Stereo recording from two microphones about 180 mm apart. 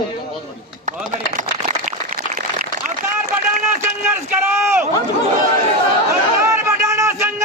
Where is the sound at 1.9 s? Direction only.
50° right (ahead or behind).